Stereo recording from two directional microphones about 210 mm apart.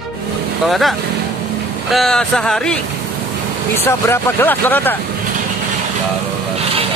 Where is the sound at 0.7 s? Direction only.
Centre (ahead or behind).